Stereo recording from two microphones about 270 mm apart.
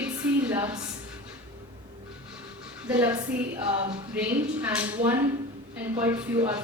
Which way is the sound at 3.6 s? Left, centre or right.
Right.